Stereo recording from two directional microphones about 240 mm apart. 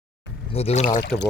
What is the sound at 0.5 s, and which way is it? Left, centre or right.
Speech, left.